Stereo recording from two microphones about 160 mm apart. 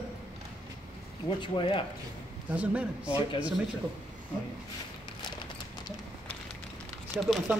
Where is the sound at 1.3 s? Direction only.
30° left (ahead or behind).